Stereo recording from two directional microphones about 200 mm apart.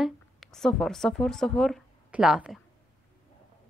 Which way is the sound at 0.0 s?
Centre (ahead or behind).